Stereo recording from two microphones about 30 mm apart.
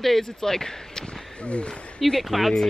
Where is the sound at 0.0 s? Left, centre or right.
Centre.